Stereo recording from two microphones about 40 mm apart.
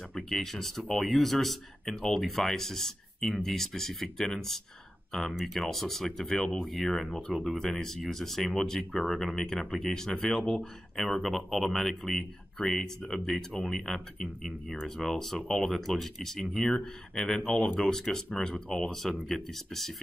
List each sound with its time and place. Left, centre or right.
0.1 s speech: centre
18.3 s speech: centre